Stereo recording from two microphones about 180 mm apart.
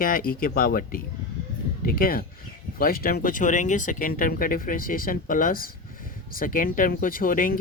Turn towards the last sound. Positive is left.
turn(degrees=50)  # may be behind; listen again after turning